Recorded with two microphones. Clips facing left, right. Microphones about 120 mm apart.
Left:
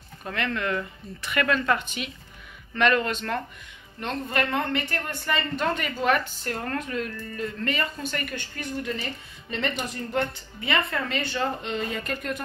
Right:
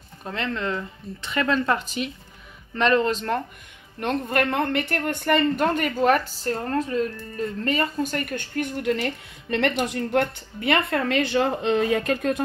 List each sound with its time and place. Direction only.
0.2 s speech: 25° right (ahead or behind)
4.0 s speech: 50° right (ahead or behind); by 12.4 s 90° right